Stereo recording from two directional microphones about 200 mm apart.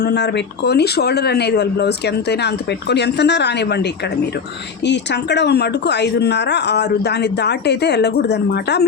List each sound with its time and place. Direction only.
0.0 s speech: 55° left (ahead or behind)
4.9 s speech: 60° left (ahead or behind)